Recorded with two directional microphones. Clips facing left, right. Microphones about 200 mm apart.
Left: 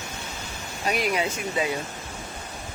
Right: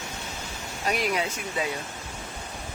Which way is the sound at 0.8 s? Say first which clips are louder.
Left 2 dB; 5° left (ahead or behind).